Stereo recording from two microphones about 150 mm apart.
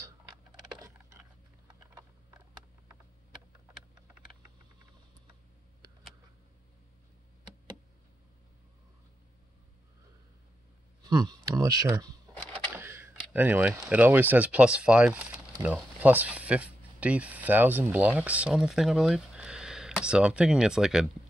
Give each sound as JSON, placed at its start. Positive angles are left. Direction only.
{"t": 11.0, "sound": "speech", "side_deg": -25}
{"t": 12.7, "sound": "speech", "side_deg": -15}